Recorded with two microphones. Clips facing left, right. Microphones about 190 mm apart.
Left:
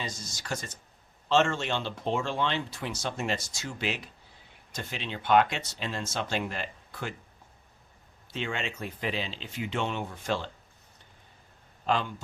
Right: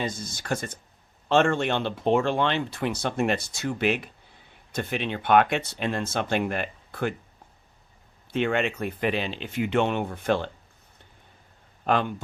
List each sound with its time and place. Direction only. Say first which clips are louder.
0.0 s speech: right 7 dB; 55° right (ahead or behind)
8.3 s speech: right 9 dB; 60° right (ahead or behind)
11.9 s speech: right 4 dB; 55° right (ahead or behind)